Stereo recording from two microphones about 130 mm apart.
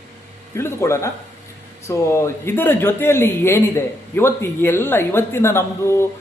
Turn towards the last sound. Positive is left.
turn(degrees=20)  # may be behind; listen again after turning